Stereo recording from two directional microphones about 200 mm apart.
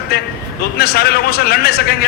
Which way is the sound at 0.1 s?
50° left (ahead or behind).